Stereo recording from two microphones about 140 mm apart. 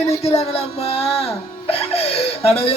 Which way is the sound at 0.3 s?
45° left (ahead or behind).